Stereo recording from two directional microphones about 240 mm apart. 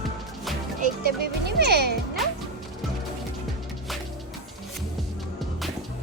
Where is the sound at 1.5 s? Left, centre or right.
Right.